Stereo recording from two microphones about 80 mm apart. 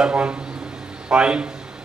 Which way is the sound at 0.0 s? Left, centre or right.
Centre.